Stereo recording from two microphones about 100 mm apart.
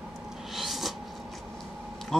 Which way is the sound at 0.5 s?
Centre (ahead or behind).